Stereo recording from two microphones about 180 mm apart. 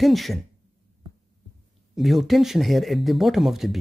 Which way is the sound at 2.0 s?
Centre (ahead or behind).